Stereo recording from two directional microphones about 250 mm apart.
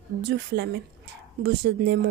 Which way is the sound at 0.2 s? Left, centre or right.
Right.